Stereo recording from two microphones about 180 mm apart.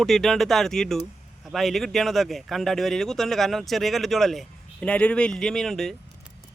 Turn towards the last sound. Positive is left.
turn(degrees=0)  # may be behind; listen again after turning